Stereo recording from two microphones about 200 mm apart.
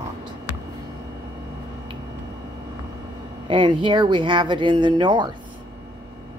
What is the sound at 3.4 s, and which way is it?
A woman's voice, 25° right (ahead or behind).